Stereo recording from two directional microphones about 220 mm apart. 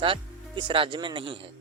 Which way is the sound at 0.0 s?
25° right (ahead or behind).